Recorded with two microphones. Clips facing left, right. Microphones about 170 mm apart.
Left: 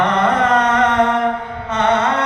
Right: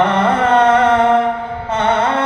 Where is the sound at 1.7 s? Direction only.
30° right (ahead or behind).